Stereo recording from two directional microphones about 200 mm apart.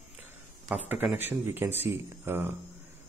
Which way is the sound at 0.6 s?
10° right (ahead or behind).